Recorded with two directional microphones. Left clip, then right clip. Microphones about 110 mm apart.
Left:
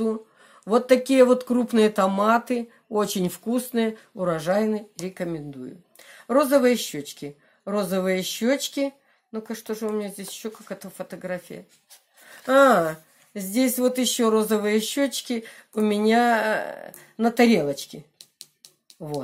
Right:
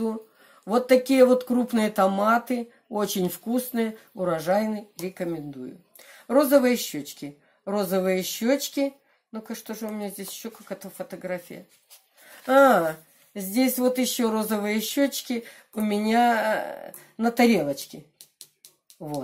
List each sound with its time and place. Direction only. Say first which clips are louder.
0.0 s speech: left 3 dB; 40° left (ahead or behind)
18.1 s music: left 3 dB; 35° left (ahead or behind)